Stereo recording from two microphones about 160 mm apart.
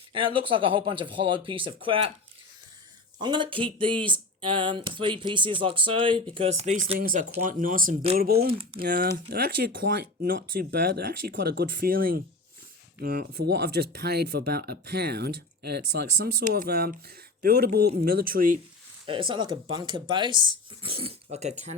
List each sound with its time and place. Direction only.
0.1 s speech: 30° right (ahead or behind)
3.2 s speech: 30° right (ahead or behind)
7.0 s speech: 55° right (ahead or behind)
8.2 s speech: 75° right (ahead or behind)
19.3 s speech: 30° right (ahead or behind); by 21.5 s 45° right (ahead or behind)